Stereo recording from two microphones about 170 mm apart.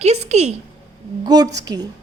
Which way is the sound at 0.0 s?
40° right (ahead or behind).